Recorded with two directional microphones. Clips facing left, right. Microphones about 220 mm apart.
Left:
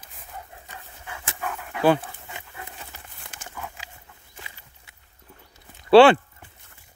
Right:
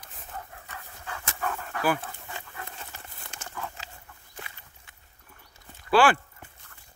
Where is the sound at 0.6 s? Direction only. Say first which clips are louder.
Even; 15° left (ahead or behind).